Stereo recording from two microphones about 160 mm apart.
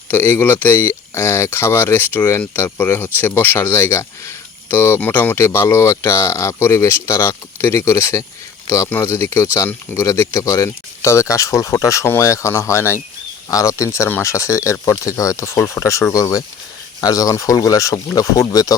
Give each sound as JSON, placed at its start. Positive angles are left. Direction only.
{"t": 0.1, "sound": "speech", "side_deg": 10}